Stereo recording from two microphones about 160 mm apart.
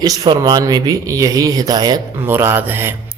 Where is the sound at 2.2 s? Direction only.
15° right (ahead or behind).